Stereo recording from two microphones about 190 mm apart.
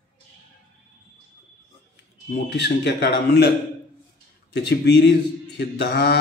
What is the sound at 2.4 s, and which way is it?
Mantra, 65° left (ahead or behind).